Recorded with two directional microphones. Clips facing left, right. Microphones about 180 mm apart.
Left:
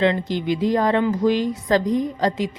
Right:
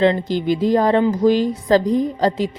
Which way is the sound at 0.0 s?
35° right (ahead or behind).